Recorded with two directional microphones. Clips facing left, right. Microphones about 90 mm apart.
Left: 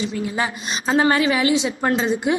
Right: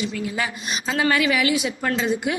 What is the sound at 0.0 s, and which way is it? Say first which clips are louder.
A woman's voice: left 3 dB; 30° left (ahead or behind).